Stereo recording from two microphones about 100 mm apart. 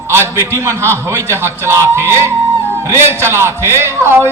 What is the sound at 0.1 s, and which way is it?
A man's voice, 25° right (ahead or behind).